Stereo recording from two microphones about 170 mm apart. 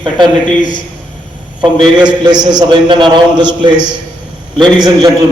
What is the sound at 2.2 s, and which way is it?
A man's voice, 25° right (ahead or behind).